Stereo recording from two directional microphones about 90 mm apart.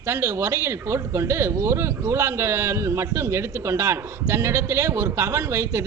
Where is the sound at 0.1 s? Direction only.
30° right (ahead or behind).